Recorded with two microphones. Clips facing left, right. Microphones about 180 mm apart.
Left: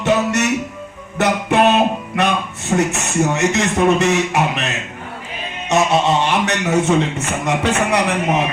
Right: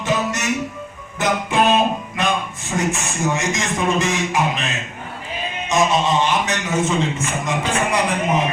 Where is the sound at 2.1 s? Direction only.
65° left (ahead or behind).